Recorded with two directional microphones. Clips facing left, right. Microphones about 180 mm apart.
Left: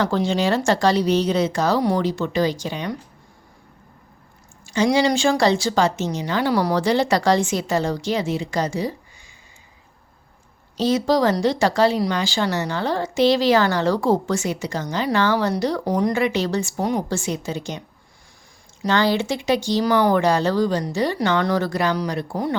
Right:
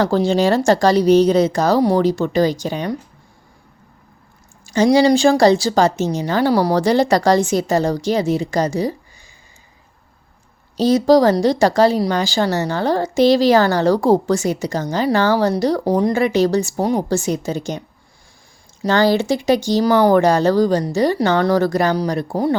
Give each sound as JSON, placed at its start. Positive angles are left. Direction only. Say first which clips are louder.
{"t": 0.0, "sound": "speech", "louder": "right 5 dB", "side_deg": -40}
{"t": 4.6, "sound": "speech", "louder": "right 5 dB", "side_deg": -40}
{"t": 10.8, "sound": "speech", "louder": "right 6 dB", "side_deg": -40}
{"t": 18.8, "sound": "speech", "louder": "right 4 dB", "side_deg": -40}